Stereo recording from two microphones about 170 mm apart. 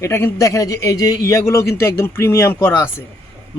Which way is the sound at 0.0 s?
15° left (ahead or behind).